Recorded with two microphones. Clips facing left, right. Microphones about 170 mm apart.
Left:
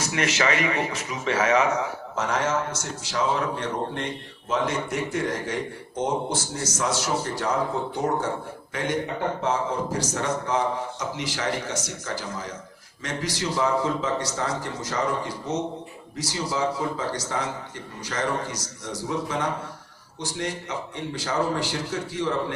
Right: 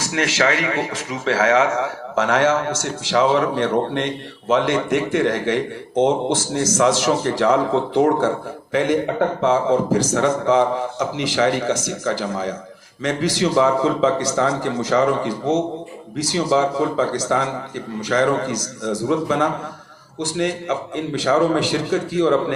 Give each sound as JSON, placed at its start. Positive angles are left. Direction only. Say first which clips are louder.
{"t": 0.0, "sound": "a man's voice", "louder": "right 5 dB", "side_deg": -90}